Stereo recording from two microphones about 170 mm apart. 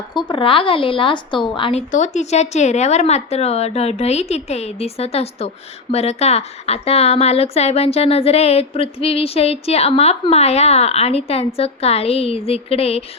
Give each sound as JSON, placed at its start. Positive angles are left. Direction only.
{"t": 0.1, "sound": "a woman's voice", "side_deg": 25}
{"t": 1.9, "sound": "speech", "side_deg": 45}